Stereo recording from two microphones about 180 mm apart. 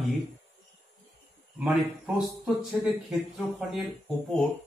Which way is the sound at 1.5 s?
5° right (ahead or behind).